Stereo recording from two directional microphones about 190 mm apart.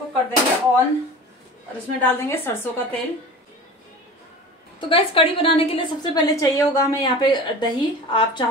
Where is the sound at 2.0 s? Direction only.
10° left (ahead or behind).